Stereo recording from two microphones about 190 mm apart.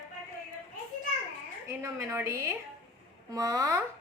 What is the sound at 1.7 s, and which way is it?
A woman's voice, 15° right (ahead or behind).